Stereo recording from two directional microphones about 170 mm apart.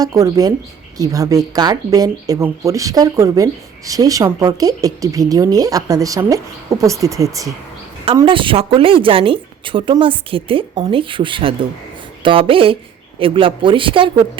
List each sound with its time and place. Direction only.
0.0 s speech: 20° right (ahead or behind)
8.0 s a woman's voice: 30° right (ahead or behind)